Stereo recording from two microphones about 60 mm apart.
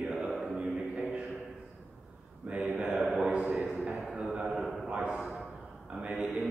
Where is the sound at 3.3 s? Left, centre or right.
Centre.